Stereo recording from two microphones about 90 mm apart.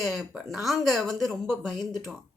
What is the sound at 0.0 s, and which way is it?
A woman's voice, centre (ahead or behind).